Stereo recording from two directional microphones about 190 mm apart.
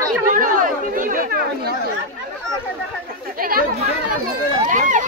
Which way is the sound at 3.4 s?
50° right (ahead or behind).